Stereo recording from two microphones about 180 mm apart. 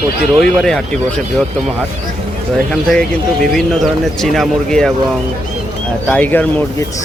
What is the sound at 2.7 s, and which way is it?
Speech, 5° left (ahead or behind).